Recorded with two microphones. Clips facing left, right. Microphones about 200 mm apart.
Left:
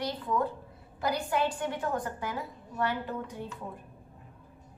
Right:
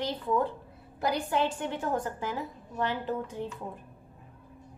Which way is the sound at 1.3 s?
25° right (ahead or behind).